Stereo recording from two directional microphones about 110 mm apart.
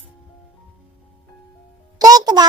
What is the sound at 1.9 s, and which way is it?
Speech, 35° right (ahead or behind).